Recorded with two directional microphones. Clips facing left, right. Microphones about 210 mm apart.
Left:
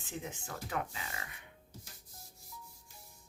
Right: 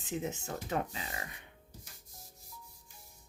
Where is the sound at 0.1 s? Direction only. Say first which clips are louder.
Right 6 dB; 20° right (ahead or behind).